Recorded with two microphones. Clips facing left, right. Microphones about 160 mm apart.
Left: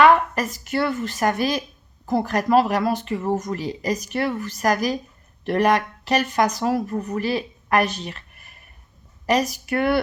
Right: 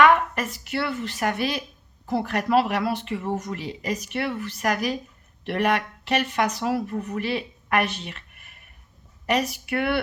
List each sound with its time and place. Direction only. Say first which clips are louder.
0.0 s speech: left 3 dB; 35° left (ahead or behind)